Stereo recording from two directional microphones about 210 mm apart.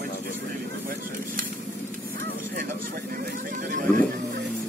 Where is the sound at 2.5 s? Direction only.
45° right (ahead or behind).